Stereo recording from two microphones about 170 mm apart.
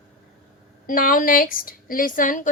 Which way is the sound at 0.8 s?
55° left (ahead or behind).